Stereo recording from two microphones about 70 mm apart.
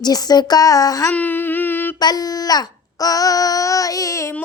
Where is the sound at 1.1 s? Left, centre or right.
Left.